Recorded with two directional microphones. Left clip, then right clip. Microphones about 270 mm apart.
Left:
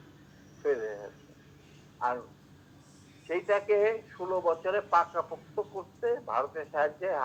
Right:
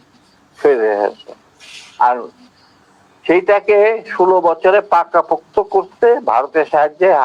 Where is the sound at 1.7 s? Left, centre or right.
Right.